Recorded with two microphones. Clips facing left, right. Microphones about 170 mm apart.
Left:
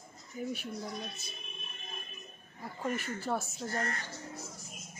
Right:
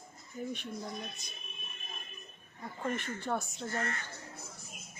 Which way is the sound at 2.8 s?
5° left (ahead or behind).